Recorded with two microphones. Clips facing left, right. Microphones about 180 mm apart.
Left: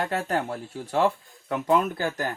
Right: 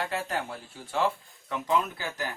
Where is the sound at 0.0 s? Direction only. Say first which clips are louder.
Left 5 dB; 45° left (ahead or behind).